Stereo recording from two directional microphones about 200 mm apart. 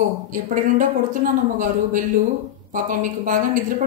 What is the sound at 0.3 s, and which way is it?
A woman's voice, 40° right (ahead or behind).